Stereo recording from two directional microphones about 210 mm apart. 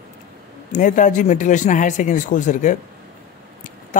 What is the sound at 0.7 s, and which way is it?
A man's voice, 40° left (ahead or behind).